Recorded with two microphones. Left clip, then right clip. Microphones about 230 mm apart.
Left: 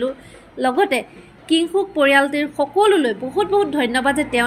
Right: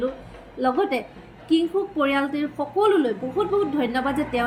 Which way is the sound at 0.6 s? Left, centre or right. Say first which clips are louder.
Left 5 dB; left.